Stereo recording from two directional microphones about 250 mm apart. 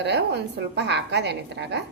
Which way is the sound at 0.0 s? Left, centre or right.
Right.